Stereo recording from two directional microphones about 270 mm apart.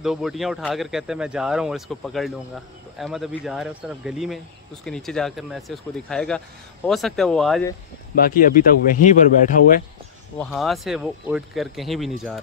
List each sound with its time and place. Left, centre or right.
0.0 s speech: centre
8.2 s a man's voice: left
10.4 s speech: centre